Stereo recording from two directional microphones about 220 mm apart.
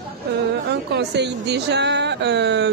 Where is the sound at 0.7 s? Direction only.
50° right (ahead or behind).